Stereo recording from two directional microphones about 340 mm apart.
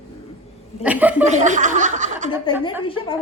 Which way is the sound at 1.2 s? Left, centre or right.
Right.